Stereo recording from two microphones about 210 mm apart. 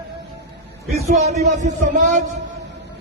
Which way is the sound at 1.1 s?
30° right (ahead or behind).